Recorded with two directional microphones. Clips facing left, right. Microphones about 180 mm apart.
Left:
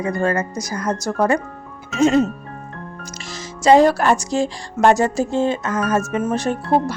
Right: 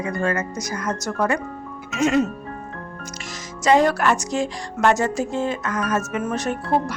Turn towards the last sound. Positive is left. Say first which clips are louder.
# left 3 dB
turn(degrees=30)  # may be behind; listen again after turning